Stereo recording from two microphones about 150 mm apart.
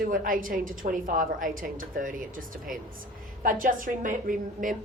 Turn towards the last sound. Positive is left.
turn(degrees=-65)  # may be behind; listen again after turning